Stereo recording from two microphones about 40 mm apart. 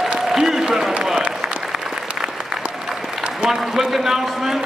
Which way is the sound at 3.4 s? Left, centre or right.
Centre.